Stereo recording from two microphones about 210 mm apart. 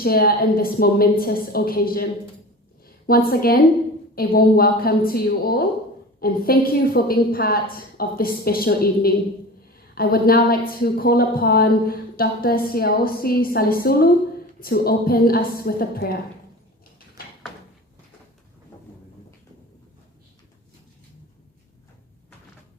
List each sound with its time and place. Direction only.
0.0 s a woman's voice: 45° left (ahead or behind)